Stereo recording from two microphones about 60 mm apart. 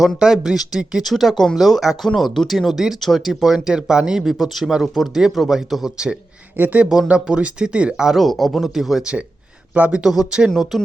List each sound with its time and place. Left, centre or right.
0.2 s speech: centre
6.6 s speech: right; by 9.0 s centre
9.7 s speech: right
10.0 s speech: centre